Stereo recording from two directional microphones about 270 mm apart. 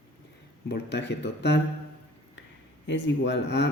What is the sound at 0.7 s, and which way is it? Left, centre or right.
Speech, left.